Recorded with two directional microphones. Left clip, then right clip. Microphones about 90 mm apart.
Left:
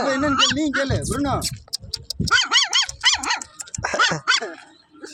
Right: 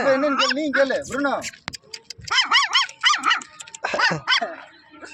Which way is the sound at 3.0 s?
45° left (ahead or behind).